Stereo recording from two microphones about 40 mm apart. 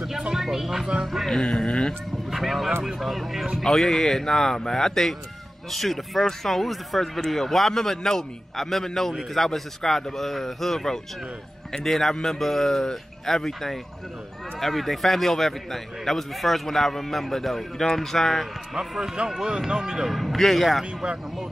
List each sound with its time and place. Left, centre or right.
0.3 s speech: centre
2.3 s a man's voice: centre
18.8 s speech: centre
20.1 s a man's voice: centre